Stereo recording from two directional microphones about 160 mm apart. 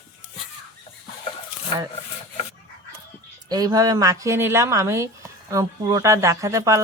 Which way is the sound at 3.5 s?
25° right (ahead or behind).